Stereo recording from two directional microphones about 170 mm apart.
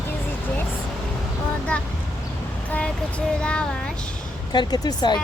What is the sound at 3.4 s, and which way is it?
Speech, 5° left (ahead or behind).